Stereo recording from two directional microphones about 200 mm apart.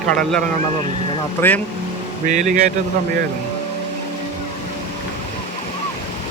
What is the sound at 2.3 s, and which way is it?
Speech, 40° right (ahead or behind).